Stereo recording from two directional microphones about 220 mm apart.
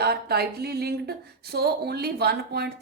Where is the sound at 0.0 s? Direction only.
45° right (ahead or behind).